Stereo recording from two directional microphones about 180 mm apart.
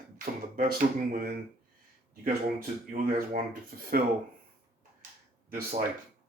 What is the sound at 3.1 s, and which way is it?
Speech, 55° right (ahead or behind).